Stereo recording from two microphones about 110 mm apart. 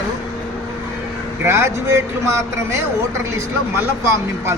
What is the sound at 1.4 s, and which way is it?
Speech, 25° right (ahead or behind).